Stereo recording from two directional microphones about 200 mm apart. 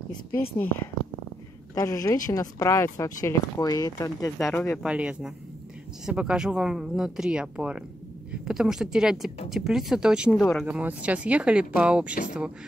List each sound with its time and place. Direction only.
1.8 s speech: 15° left (ahead or behind)
4.4 s speech: centre (ahead or behind)